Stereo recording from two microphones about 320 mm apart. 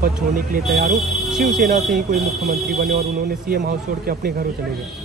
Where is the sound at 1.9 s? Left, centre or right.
Right.